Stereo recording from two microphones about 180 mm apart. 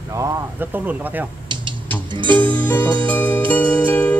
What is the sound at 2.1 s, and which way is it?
Music, 25° right (ahead or behind).